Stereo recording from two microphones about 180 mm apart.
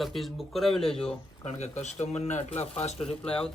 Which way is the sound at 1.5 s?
40° left (ahead or behind).